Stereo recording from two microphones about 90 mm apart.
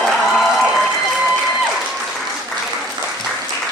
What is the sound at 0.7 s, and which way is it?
Applause, 5° right (ahead or behind).